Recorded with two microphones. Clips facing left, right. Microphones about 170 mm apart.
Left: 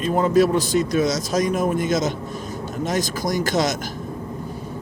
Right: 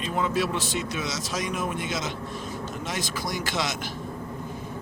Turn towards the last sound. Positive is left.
turn(degrees=40)  # may be behind; listen again after turning